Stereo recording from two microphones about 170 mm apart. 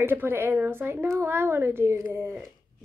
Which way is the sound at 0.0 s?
15° right (ahead or behind).